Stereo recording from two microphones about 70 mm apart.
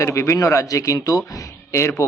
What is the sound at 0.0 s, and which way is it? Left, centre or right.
A man's voice, left.